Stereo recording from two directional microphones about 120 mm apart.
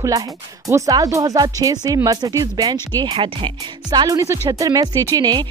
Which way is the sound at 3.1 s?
50° right (ahead or behind).